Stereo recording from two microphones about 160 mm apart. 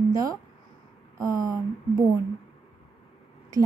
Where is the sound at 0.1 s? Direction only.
20° right (ahead or behind).